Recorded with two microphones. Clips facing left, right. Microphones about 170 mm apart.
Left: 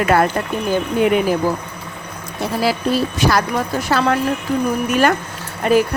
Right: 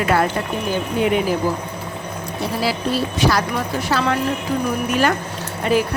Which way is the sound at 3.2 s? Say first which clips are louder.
Right 1 dB; 50° left (ahead or behind).